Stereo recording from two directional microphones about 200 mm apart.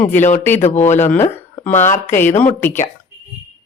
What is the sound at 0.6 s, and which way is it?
Speech, 35° left (ahead or behind).